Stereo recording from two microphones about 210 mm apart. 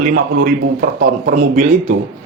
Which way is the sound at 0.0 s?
45° right (ahead or behind).